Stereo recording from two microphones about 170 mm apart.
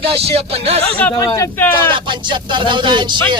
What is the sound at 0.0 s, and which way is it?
Speech, 35° right (ahead or behind).